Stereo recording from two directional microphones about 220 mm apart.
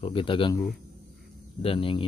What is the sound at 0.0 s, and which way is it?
Speech, 25° left (ahead or behind).